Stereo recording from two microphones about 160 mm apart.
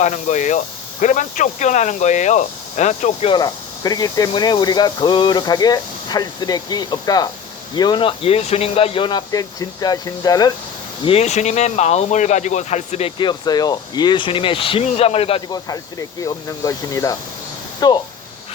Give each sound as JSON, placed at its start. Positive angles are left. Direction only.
{"t": 0.0, "sound": "speech", "side_deg": 50}
{"t": 11.0, "sound": "speech", "side_deg": 40}
{"t": 15.5, "sound": "speech", "side_deg": 20}